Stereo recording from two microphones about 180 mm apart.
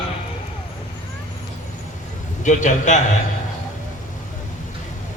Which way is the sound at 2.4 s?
45° left (ahead or behind).